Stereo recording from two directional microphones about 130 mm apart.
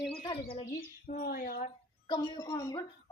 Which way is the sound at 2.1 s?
30° left (ahead or behind).